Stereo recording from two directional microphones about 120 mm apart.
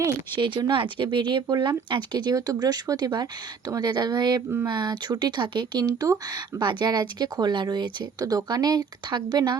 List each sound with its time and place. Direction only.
0.3 s speech: 40° right (ahead or behind)